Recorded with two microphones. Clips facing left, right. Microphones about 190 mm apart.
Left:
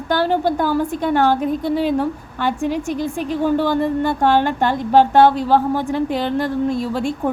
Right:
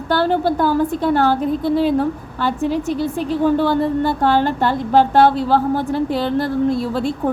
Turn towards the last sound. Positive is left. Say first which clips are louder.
# right 2 dB
turn(degrees=15)  # may be behind; listen again after turning